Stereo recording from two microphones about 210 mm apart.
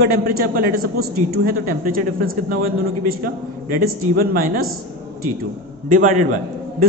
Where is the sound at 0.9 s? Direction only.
45° right (ahead or behind).